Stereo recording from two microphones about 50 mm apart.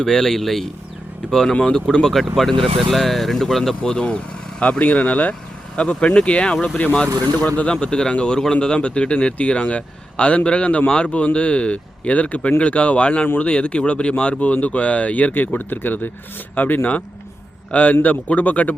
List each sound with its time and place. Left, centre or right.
0.0 s speech: centre
3.9 s speech: left
13.2 s speech: left
13.5 s a man's voice: left